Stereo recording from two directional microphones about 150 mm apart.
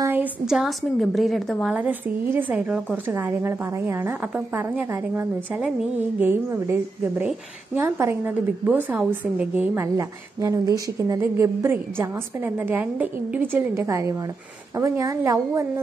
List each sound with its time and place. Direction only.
0.0 s a woman's voice: 10° right (ahead or behind)
1.7 s a woman's voice: 10° right (ahead or behind)